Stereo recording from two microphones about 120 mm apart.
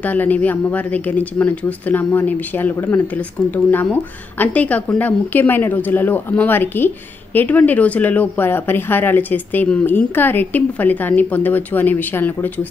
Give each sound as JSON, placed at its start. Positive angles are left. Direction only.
{"t": 0.0, "sound": "speech", "side_deg": 15}